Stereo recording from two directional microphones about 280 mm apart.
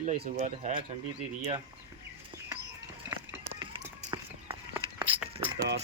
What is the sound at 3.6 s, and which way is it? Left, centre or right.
Run, centre.